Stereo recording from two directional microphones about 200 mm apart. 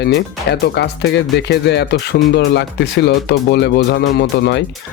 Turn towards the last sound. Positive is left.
turn(degrees=55)  # may be behind; listen again after turning